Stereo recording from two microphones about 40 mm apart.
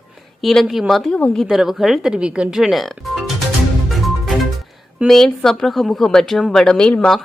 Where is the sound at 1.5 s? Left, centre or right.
Centre.